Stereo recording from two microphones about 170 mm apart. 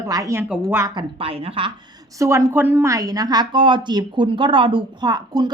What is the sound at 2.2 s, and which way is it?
A woman's voice, 15° right (ahead or behind).